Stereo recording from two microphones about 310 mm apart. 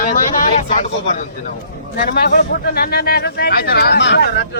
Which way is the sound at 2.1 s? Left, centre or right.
Left.